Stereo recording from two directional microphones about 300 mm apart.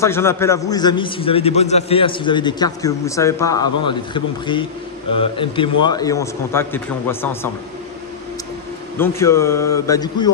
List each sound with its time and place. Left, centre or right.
0.0 s a man's voice: centre
8.9 s a man's voice: centre